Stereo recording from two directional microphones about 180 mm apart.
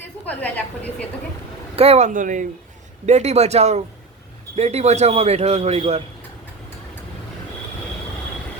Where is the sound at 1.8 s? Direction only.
35° right (ahead or behind).